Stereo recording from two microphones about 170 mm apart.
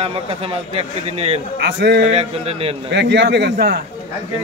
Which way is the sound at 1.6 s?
85° right.